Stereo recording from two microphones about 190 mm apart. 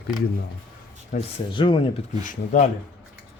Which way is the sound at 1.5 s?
25° left (ahead or behind).